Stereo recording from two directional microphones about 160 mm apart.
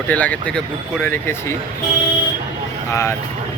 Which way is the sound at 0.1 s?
10° left (ahead or behind).